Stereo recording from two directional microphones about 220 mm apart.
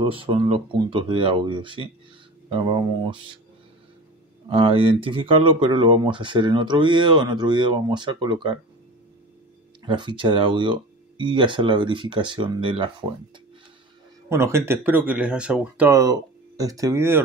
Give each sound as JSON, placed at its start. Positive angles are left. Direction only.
{"t": 0.0, "sound": "speech", "side_deg": -25}
{"t": 4.5, "sound": "speech", "side_deg": -25}
{"t": 9.8, "sound": "speech", "side_deg": -20}
{"t": 14.3, "sound": "speech", "side_deg": -10}